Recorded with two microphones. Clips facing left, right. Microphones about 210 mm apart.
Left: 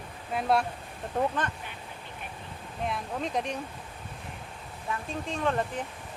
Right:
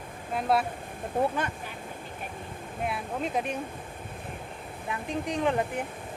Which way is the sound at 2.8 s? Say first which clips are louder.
Right 1 dB; 5° right (ahead or behind).